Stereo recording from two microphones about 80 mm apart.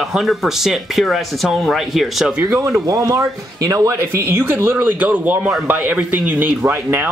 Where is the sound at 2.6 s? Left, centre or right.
Right.